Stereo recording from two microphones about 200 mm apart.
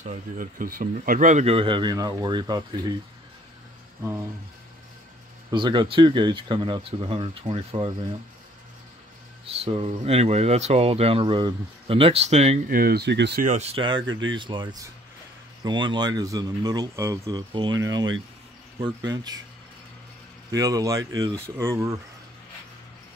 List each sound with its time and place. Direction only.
0.0 s speech: 40° right (ahead or behind); by 2.6 s 20° right (ahead or behind)
5.5 s speech: 25° right (ahead or behind)
9.5 s speech: 30° right (ahead or behind)
12.6 s speech: 50° right (ahead or behind)
13.4 s speech: 35° right (ahead or behind)
14.0 s speech: 75° right (ahead or behind)
14.3 s speech: 25° right (ahead or behind)
19.1 s speech: 20° right (ahead or behind)
20.5 s speech: 15° right (ahead or behind)